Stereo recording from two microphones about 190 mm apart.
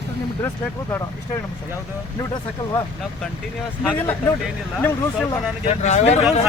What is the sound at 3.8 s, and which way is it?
Speech, 5° left (ahead or behind).